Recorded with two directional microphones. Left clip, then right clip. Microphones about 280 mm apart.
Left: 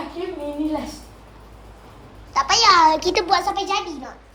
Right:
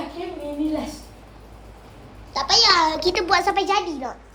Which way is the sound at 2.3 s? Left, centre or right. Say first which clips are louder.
Left 1 dB; centre.